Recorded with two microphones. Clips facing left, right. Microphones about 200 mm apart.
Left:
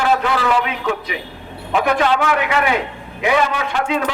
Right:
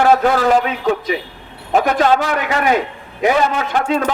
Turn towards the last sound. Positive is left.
turn(degrees=-45)  # may be behind; listen again after turning